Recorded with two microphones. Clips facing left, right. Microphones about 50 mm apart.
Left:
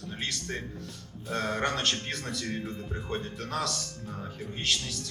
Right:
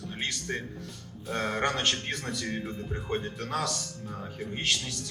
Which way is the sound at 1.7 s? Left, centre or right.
Centre.